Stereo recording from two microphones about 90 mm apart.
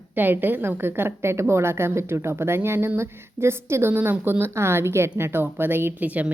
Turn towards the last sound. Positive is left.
turn(degrees=-15)  # may be behind; listen again after turning